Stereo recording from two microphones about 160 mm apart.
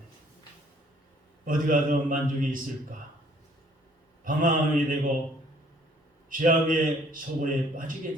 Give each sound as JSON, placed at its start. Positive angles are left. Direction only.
{"t": 1.5, "sound": "a man's voice", "side_deg": -55}
{"t": 4.2, "sound": "a man's voice", "side_deg": -55}
{"t": 6.3, "sound": "a man's voice", "side_deg": -55}